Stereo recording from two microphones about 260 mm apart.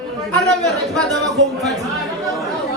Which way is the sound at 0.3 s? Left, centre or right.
Centre.